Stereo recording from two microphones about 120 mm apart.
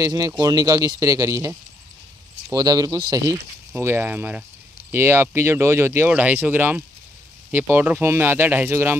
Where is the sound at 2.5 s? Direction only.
30° right (ahead or behind).